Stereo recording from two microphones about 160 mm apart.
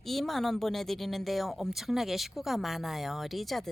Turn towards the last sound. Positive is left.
turn(degrees=0)  # may be behind; listen again after turning